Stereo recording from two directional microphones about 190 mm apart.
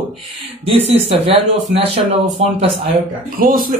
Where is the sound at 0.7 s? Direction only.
30° right (ahead or behind).